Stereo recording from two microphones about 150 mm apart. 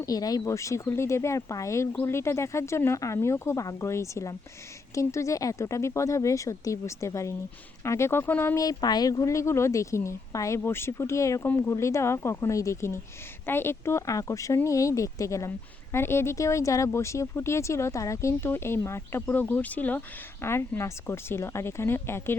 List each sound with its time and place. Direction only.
0.0 s a woman's voice: 25° left (ahead or behind)